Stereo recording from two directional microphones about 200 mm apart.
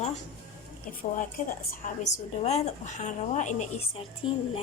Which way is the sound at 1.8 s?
40° left (ahead or behind).